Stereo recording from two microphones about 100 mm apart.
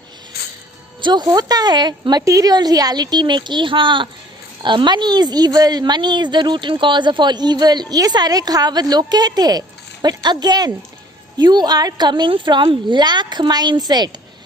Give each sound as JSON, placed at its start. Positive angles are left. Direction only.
{"t": 1.0, "sound": "a woman's voice", "side_deg": -45}